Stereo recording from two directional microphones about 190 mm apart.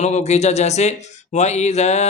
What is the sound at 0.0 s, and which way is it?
Speech, 35° left (ahead or behind).